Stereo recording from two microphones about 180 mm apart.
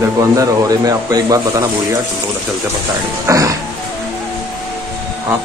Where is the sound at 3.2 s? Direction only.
15° right (ahead or behind).